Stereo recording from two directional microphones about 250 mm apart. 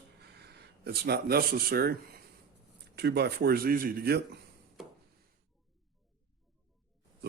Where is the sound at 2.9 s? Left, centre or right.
Right.